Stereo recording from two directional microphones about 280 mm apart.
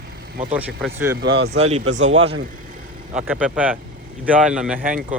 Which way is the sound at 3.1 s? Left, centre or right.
Centre.